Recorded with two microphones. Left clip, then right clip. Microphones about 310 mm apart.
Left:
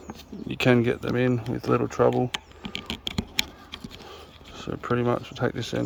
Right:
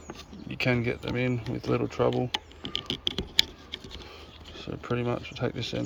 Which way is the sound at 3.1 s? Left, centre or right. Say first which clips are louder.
Right 3 dB; centre.